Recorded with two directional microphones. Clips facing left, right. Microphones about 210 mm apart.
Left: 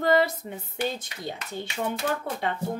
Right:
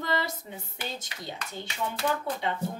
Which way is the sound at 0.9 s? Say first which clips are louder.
Left 4 dB; 55° left (ahead or behind).